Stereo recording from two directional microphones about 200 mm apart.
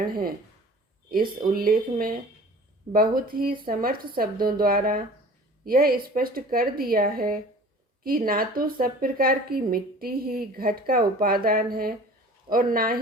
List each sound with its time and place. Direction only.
0.0 s a woman's voice: 45° right (ahead or behind)